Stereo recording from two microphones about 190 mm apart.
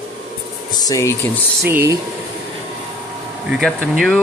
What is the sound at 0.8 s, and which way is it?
Speech, 15° left (ahead or behind).